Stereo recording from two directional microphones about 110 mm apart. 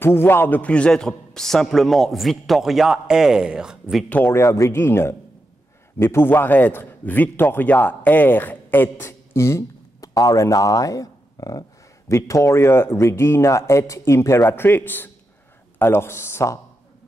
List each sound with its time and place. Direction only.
0.0 s a man's voice: 20° left (ahead or behind); by 4.0 s 5° right (ahead or behind)
4.1 s a man's voice: 20° left (ahead or behind)